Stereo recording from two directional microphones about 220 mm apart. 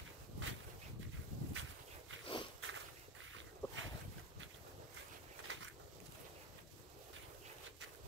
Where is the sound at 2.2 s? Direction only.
25° left (ahead or behind).